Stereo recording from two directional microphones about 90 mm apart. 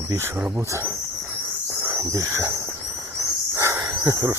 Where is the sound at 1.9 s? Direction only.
35° right (ahead or behind).